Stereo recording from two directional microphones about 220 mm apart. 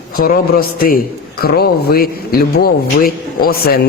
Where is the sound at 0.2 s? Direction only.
40° left (ahead or behind).